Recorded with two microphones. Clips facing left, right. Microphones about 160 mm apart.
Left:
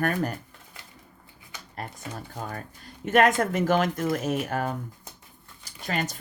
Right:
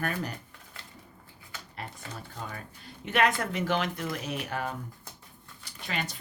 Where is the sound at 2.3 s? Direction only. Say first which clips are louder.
Left 5 dB; 45° left (ahead or behind).